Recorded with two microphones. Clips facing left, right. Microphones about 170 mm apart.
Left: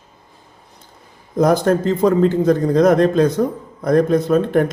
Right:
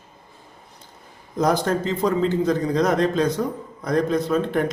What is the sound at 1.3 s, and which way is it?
A man's voice, 50° left (ahead or behind).